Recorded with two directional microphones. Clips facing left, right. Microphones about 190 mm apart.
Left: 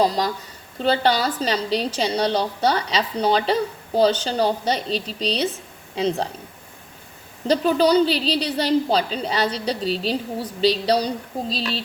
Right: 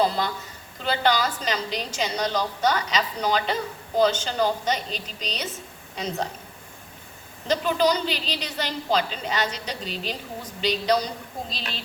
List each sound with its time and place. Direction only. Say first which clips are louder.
0.0 s a woman's voice: left 3 dB; 35° left (ahead or behind)
7.4 s a woman's voice: left 4 dB; 35° left (ahead or behind)